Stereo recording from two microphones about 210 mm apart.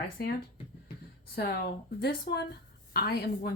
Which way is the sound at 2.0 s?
50° left (ahead or behind).